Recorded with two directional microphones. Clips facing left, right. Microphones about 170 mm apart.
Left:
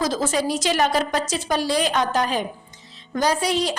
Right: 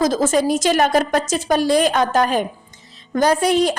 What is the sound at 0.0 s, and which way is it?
A woman's voice, 45° right (ahead or behind).